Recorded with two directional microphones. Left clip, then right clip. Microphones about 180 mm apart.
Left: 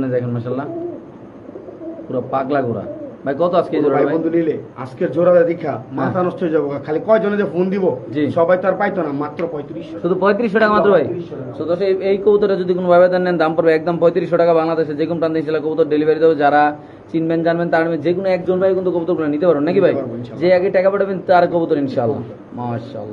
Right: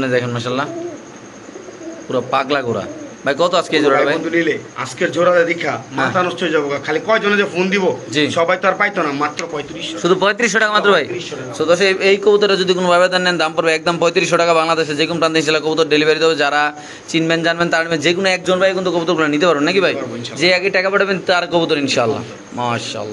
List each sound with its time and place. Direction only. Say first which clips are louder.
0.0 s a man's voice: right 3 dB; 10° right (ahead or behind)
2.1 s a man's voice: right 2 dB; 5° right (ahead or behind)
4.3 s a man's voice: right 1 dB; 35° left (ahead or behind)
10.0 s a man's voice: right 2 dB; 10° right (ahead or behind)
11.5 s a man's voice: right 4 dB; 25° right (ahead or behind)
12.4 s a man's voice: right 2 dB; 5° right (ahead or behind); by 18.8 s 30° right (ahead or behind)
19.0 s a man's voice: right 2 dB; 15° right (ahead or behind)